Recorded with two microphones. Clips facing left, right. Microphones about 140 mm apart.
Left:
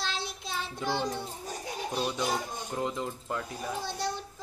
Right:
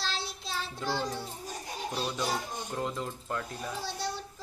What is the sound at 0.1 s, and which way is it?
Child singing, 15° left (ahead or behind).